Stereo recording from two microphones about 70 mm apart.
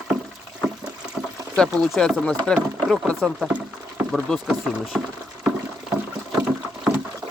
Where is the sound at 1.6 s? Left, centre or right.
Centre.